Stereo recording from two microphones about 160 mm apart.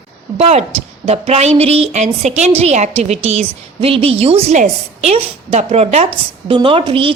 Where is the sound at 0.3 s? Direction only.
40° right (ahead or behind).